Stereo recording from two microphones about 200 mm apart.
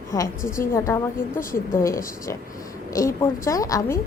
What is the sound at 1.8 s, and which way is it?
A woman's voice, 15° left (ahead or behind).